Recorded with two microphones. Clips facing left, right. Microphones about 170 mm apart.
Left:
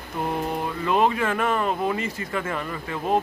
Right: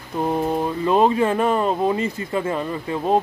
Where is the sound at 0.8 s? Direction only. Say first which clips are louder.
Right 4 dB; 30° right (ahead or behind).